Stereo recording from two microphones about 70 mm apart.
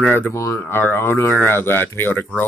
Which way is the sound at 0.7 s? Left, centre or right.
Left.